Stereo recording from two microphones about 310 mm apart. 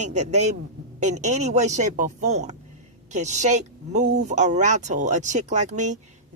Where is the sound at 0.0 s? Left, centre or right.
Right.